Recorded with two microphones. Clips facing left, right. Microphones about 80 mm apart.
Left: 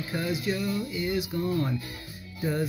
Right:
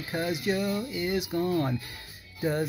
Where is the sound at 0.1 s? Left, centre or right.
Right.